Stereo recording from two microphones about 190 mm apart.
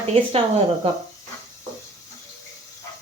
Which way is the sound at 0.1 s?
30° right (ahead or behind).